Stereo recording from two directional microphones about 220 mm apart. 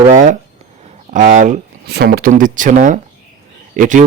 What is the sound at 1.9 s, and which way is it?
Speech, 45° right (ahead or behind).